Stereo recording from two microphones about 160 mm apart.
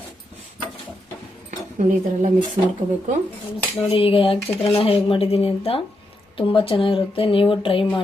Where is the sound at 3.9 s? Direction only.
35° left (ahead or behind).